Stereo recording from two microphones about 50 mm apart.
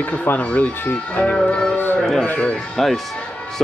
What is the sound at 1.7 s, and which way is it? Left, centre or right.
Speech, left.